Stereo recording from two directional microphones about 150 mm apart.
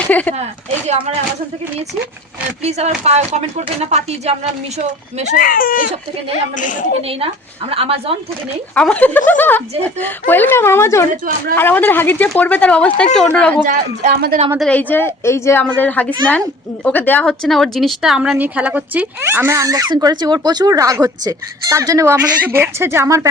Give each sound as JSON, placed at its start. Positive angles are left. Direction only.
{"t": 0.1, "sound": "speech", "side_deg": 10}
{"t": 2.6, "sound": "speech", "side_deg": -45}
{"t": 5.4, "sound": "speech", "side_deg": 70}
{"t": 6.6, "sound": "a woman's voice", "side_deg": 60}
{"t": 7.7, "sound": "speech", "side_deg": -40}
{"t": 8.7, "sound": "speech", "side_deg": 10}
{"t": 13.7, "sound": "a man's voice", "side_deg": -80}
{"t": 14.6, "sound": "speech", "side_deg": 10}